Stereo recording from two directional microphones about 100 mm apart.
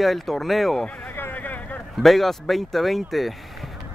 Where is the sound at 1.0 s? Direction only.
20° left (ahead or behind).